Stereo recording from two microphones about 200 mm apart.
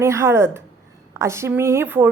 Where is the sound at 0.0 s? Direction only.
15° right (ahead or behind).